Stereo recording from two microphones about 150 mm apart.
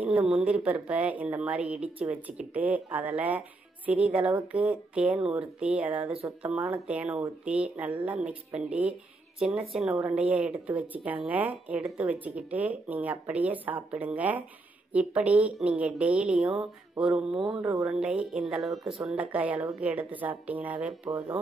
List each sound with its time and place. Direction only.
0.0 s a woman's voice: 5° right (ahead or behind)
17.8 s a woman's voice: 5° right (ahead or behind)